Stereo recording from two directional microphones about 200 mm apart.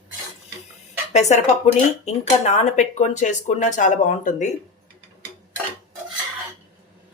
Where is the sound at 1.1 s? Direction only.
35° left (ahead or behind).